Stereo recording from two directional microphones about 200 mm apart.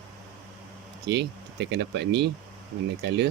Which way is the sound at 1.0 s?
60° right (ahead or behind).